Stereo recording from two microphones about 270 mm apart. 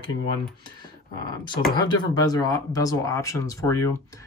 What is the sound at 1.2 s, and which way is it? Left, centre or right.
Speech, centre.